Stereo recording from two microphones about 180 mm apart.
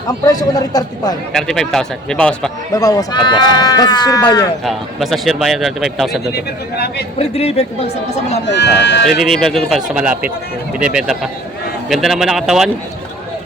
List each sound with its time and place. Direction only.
0.3 s speech: 20° left (ahead or behind)
1.3 s a man's voice: centre (ahead or behind)
2.7 s speech: 20° left (ahead or behind)
4.6 s a man's voice: centre (ahead or behind)
6.3 s speech: 65° left (ahead or behind)
7.2 s speech: 35° left (ahead or behind)
8.4 s speech: 75° left (ahead or behind)
9.0 s a man's voice: centre (ahead or behind)